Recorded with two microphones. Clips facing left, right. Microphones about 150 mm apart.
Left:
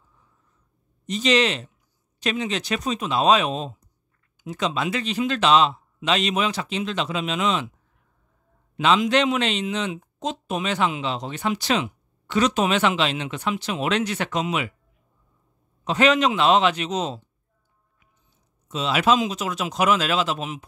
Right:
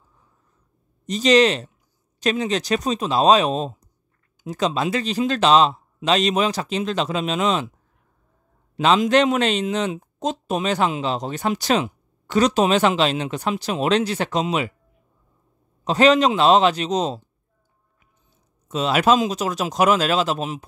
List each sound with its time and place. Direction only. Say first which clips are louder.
1.0 s speech: right 5 dB; 40° right (ahead or behind)
8.7 s speech: right 3 dB; 40° right (ahead or behind)
15.8 s speech: right 4 dB; 35° right (ahead or behind)
18.7 s speech: right 3 dB; 45° right (ahead or behind)